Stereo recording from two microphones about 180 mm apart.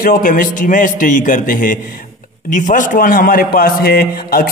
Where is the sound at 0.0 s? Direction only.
50° left (ahead or behind).